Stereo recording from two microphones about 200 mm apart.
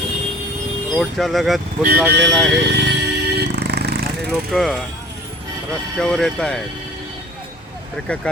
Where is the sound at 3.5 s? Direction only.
55° right (ahead or behind).